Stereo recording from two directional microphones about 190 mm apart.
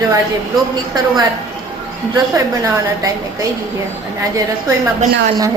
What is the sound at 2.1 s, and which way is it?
Speech, 15° right (ahead or behind).